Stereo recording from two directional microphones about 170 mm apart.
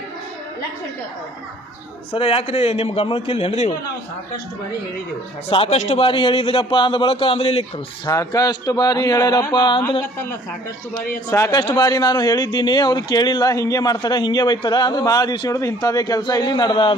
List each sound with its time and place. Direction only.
2.1 s a man's voice: 35° left (ahead or behind)
5.5 s a man's voice: 35° left (ahead or behind)
8.0 s a man's voice: 20° left (ahead or behind)
11.3 s a man's voice: 15° left (ahead or behind)